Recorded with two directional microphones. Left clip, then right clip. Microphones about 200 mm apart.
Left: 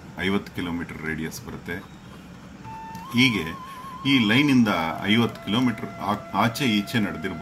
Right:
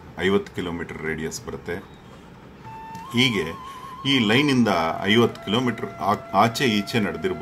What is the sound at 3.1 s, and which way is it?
Speech, 20° right (ahead or behind).